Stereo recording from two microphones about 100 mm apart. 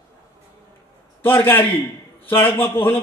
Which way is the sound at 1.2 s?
20° left (ahead or behind).